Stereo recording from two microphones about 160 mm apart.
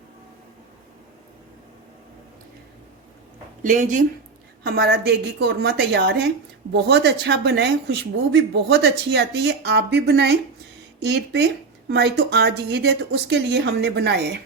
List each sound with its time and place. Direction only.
3.6 s speech: 55° right (ahead or behind)
4.6 s speech: 85° right